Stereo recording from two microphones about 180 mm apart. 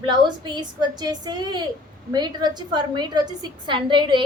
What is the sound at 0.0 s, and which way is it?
A woman's voice, 25° right (ahead or behind).